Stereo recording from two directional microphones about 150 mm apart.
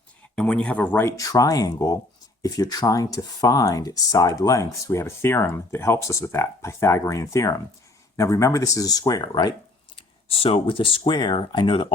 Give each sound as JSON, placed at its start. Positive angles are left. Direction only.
{"t": 0.3, "sound": "speech", "side_deg": 5}